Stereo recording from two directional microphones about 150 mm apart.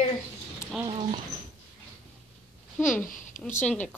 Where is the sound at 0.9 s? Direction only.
35° right (ahead or behind).